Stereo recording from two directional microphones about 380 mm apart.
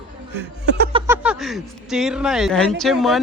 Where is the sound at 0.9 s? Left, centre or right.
Centre.